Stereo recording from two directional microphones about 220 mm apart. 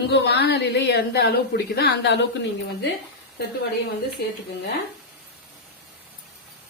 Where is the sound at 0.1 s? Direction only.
50° left (ahead or behind).